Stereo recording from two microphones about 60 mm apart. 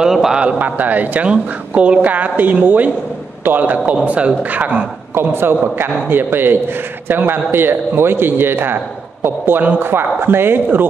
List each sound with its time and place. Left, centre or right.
0.0 s a sound: centre
0.4 s a woman's voice: right
5.1 s a man's voice: right